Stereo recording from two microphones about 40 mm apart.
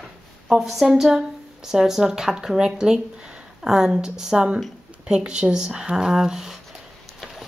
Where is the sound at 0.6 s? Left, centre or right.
Centre.